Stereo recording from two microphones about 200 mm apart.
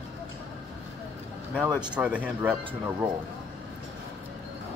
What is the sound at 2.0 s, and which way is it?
Speech, 5° right (ahead or behind).